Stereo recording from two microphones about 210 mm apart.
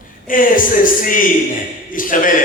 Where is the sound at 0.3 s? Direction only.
40° left (ahead or behind).